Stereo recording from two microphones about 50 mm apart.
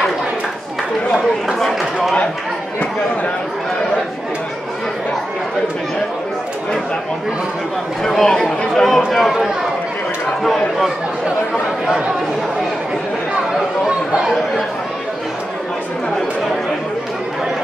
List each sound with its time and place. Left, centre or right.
1.1 s chatter: centre
8.0 s speech: centre
9.1 s speech: centre
13.8 s chatter: centre